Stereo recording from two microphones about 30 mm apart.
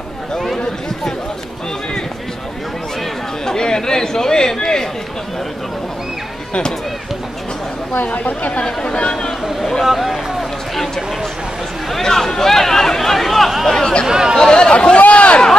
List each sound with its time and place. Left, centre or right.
3.4 s chatter: left
7.9 s speech: left
8.6 s speech: left
9.8 s speech: centre
12.0 s speech: centre
14.0 s speech: right
14.3 s speech: left
15.0 s speech: left